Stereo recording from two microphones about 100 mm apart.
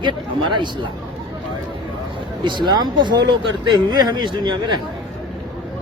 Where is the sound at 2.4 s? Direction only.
50° right (ahead or behind).